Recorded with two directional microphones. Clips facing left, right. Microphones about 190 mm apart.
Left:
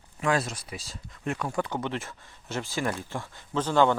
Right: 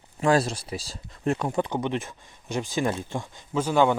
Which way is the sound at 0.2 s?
35° right (ahead or behind).